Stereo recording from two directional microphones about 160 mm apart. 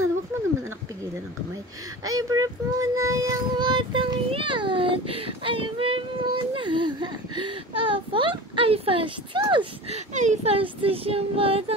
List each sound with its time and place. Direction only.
2.0 s child singing: 20° right (ahead or behind)
9.9 s child singing: 50° right (ahead or behind)